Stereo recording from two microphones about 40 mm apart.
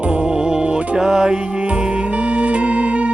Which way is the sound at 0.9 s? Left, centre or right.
Centre.